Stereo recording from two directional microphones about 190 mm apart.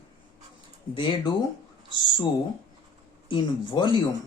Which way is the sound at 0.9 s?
25° left (ahead or behind).